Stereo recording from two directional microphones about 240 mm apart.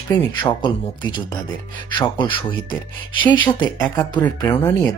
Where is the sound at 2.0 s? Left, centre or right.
Centre.